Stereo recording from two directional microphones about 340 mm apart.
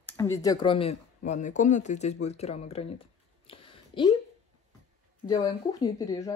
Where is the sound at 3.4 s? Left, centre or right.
Centre.